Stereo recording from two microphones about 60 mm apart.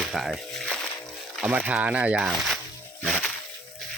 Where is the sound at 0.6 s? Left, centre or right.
Centre.